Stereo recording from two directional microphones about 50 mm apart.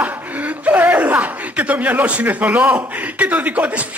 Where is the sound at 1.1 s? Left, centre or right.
Right.